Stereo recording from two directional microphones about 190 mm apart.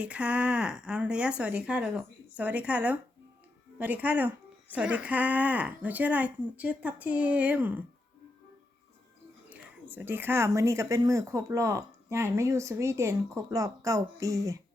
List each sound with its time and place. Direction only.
0.0 s speech: 5° right (ahead or behind)
9.5 s speech: 10° right (ahead or behind)